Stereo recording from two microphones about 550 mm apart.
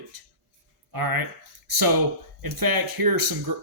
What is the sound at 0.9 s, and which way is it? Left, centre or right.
Speech, right.